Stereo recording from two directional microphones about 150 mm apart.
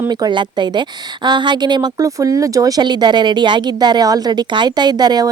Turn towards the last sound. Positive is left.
turn(degrees=-30)  # may be behind; listen again after turning